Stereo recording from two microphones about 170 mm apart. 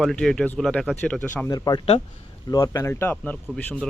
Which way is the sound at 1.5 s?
20° left (ahead or behind).